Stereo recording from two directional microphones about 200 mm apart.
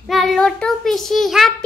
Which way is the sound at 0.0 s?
Centre (ahead or behind).